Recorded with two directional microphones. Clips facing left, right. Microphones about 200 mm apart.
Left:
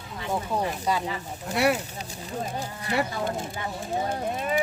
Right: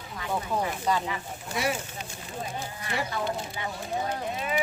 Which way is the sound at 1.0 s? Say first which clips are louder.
Left 2 dB; 35° left (ahead or behind).